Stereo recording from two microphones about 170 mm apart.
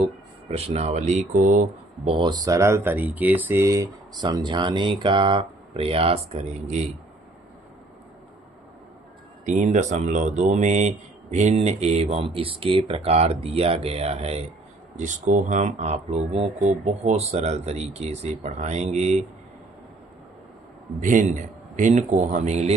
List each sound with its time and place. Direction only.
0.5 s a man's voice: 40° right (ahead or behind)
2.0 s speech: 30° right (ahead or behind)
9.5 s speech: 45° right (ahead or behind)
14.9 s a man's voice: 45° right (ahead or behind)
21.0 s a man's voice: 50° right (ahead or behind)